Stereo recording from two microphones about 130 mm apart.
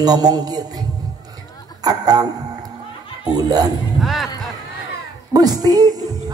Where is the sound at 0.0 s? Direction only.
30° right (ahead or behind).